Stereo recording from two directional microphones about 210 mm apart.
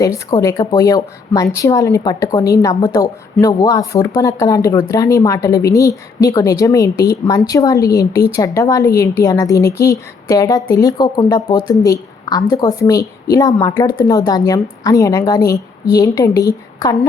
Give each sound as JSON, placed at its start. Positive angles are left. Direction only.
{"t": 0.0, "sound": "a woman's voice", "side_deg": 15}